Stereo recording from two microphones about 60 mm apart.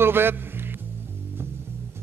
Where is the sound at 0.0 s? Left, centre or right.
Right.